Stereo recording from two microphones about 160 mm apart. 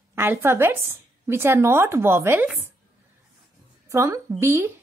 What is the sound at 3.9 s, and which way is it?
Speech, 20° right (ahead or behind).